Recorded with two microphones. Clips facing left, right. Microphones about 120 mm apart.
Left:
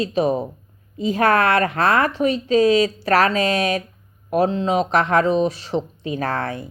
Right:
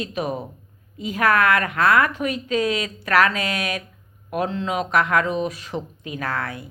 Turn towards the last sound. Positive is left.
turn(degrees=35)  # may be behind; listen again after turning